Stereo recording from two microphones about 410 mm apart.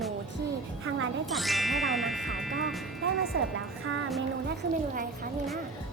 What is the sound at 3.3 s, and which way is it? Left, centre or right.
Music, right.